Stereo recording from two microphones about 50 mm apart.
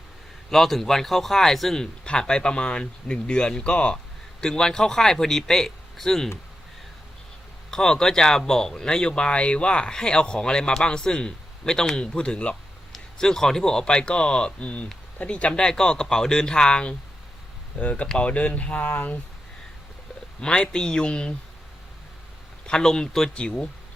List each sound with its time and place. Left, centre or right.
0.5 s a man's voice: centre
7.7 s speech: centre
12.9 s speech: centre; by 19.2 s left
20.4 s speech: centre
22.6 s speech: centre